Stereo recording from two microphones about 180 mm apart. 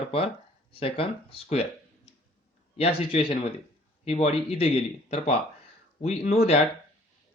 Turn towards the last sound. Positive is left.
turn(degrees=35)  # may be behind; listen again after turning